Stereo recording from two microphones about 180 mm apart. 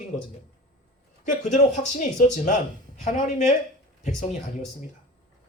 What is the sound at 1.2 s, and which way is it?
Speech, 40° left (ahead or behind).